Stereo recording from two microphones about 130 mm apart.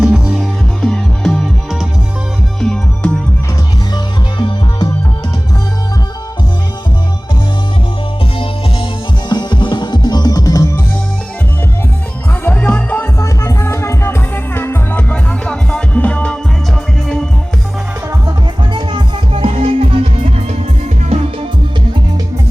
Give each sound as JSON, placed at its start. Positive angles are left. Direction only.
{"t": 0.0, "sound": "music", "side_deg": -5}
{"t": 0.8, "sound": "music", "side_deg": 5}
{"t": 3.9, "sound": "music", "side_deg": 35}
{"t": 9.3, "sound": "music", "side_deg": 35}
{"t": 12.5, "sound": "music", "side_deg": 15}
{"t": 18.7, "sound": "music", "side_deg": -40}